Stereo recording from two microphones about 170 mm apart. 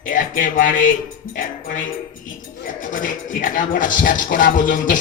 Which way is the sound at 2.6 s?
50° left (ahead or behind).